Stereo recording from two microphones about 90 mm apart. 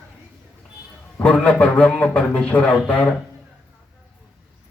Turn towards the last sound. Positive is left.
turn(degrees=10)  # may be behind; listen again after turning